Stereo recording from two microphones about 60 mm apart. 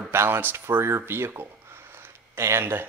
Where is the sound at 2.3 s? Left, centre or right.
Right.